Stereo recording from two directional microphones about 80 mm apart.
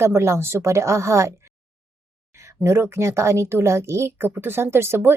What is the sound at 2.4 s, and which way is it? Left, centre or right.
A woman's voice, right.